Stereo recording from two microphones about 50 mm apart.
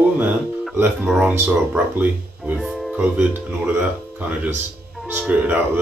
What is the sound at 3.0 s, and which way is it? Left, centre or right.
Speech, right.